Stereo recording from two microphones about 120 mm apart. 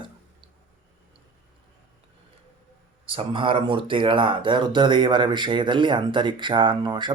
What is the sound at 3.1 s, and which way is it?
Speech, 45° right (ahead or behind).